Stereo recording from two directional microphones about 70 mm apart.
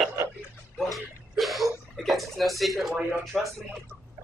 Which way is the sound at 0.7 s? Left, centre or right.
Centre.